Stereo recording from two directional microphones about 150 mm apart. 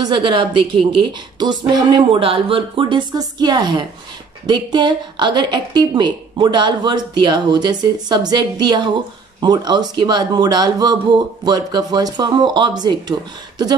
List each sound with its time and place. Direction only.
0.0 s a woman's voice: 35° right (ahead or behind)